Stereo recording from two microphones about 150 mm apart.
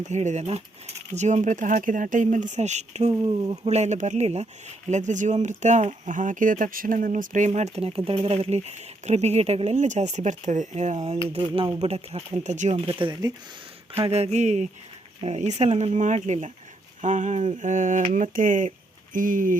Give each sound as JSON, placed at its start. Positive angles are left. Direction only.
{"t": 0.0, "sound": "speech", "side_deg": -50}
{"t": 3.1, "sound": "speech", "side_deg": -30}
{"t": 3.7, "sound": "speech", "side_deg": -50}
{"t": 11.3, "sound": "speech", "side_deg": -35}
{"t": 13.9, "sound": "speech", "side_deg": -45}